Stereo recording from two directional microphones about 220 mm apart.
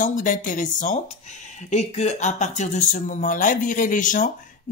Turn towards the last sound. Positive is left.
turn(degrees=35)  # may be behind; listen again after turning